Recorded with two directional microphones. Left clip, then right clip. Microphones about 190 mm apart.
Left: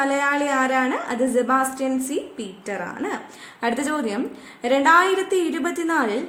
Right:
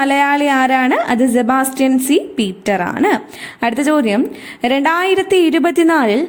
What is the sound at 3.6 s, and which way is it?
A woman's voice, 40° right (ahead or behind).